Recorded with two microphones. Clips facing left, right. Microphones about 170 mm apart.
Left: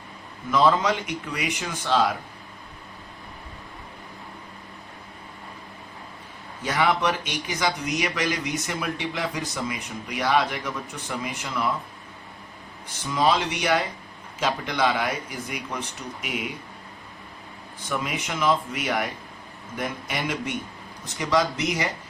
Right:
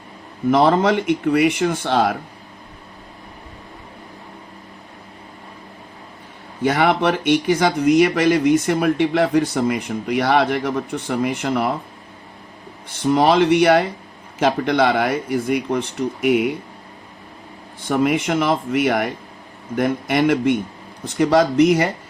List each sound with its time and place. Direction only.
0.5 s speech: 55° right (ahead or behind)
6.6 s speech: 55° right (ahead or behind)
13.1 s speech: 60° right (ahead or behind)
17.8 s speech: 55° right (ahead or behind)